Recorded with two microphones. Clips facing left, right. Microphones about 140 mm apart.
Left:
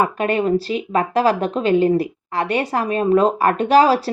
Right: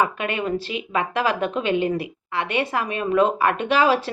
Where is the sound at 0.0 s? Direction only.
40° left (ahead or behind).